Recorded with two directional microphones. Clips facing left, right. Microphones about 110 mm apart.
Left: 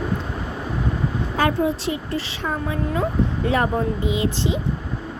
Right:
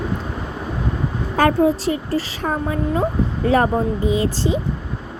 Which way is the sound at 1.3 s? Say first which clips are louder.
Right 6 dB; 40° right (ahead or behind).